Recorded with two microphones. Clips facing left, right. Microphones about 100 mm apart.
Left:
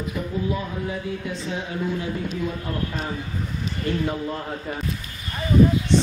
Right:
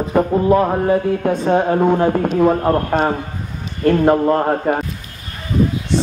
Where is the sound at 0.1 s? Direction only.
60° right (ahead or behind).